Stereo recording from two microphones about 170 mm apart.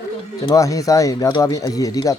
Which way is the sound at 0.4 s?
20° left (ahead or behind).